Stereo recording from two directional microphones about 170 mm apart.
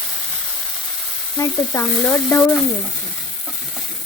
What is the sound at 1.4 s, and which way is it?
Frying, 15° left (ahead or behind).